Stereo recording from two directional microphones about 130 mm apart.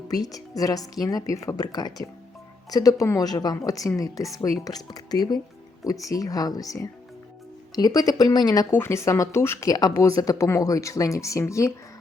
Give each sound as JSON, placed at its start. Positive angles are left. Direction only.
{"t": 0.1, "sound": "a woman's voice", "side_deg": 30}
{"t": 8.7, "sound": "speech", "side_deg": 20}